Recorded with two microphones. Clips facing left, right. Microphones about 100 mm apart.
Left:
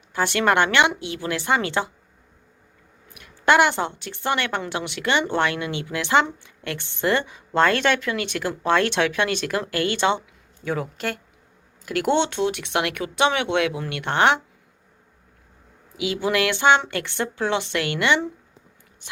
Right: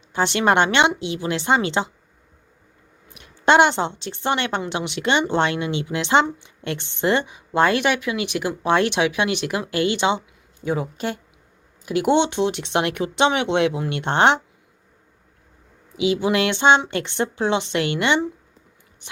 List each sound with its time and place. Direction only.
0.1 s speech: 20° right (ahead or behind)
3.2 s a woman's voice: 25° right (ahead or behind)
16.0 s speech: 25° right (ahead or behind)